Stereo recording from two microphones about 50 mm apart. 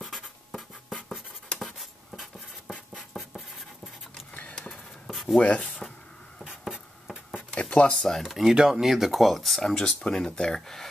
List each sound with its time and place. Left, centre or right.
0.0 s writing: centre
4.3 s a sound: left
5.4 s speech: left
6.6 s a sound: centre
7.7 s speech: left
8.0 s speech: centre
8.5 s speech: centre